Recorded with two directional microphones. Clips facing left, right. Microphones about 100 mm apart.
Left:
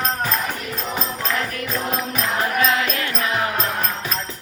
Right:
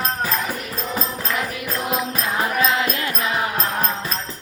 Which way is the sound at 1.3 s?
10° right (ahead or behind).